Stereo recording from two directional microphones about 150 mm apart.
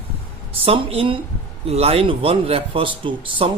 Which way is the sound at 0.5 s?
40° right (ahead or behind).